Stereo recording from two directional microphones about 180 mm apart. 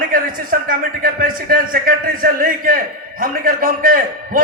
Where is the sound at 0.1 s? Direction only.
50° right (ahead or behind).